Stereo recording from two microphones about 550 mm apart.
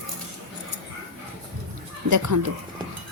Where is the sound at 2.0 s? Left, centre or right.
Right.